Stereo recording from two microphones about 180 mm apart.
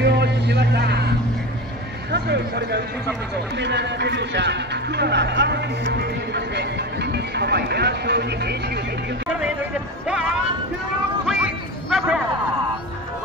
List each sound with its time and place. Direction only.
0.0 s vehicle: 70° right (ahead or behind)
2.1 s a man's voice: 65° right (ahead or behind)
11.2 s a sound: 5° right (ahead or behind)